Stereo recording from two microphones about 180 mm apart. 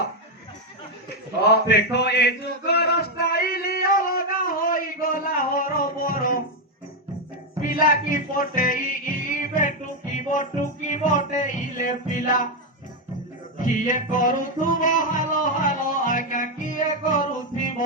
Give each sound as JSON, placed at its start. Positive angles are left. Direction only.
{"t": 1.5, "sound": "mantra", "side_deg": 70}
{"t": 2.6, "sound": "music", "side_deg": 65}
{"t": 7.6, "sound": "a sound", "side_deg": 50}
{"t": 8.1, "sound": "music", "side_deg": 50}
{"t": 13.6, "sound": "music", "side_deg": 45}